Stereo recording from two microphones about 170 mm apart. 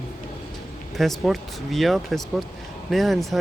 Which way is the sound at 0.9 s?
Centre (ahead or behind).